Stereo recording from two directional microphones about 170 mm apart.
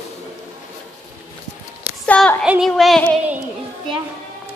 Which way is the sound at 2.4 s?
5° right (ahead or behind).